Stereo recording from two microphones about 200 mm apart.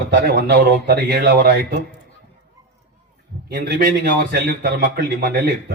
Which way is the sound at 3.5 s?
50° right (ahead or behind).